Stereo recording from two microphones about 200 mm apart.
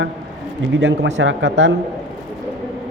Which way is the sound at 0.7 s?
65° right (ahead or behind).